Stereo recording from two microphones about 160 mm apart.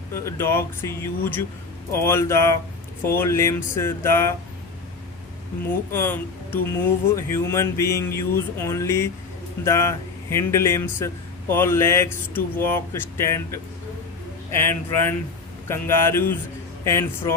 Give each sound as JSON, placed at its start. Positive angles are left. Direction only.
{"t": 0.1, "sound": "a man's voice", "side_deg": 15}
{"t": 5.9, "sound": "a man's voice", "side_deg": 15}